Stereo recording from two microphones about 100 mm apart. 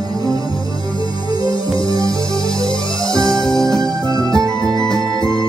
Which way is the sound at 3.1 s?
35° right (ahead or behind).